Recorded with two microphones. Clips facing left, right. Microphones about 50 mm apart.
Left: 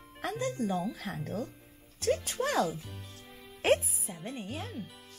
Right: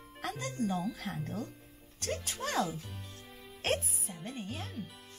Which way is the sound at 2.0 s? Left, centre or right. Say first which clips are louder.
Left 7 dB; centre.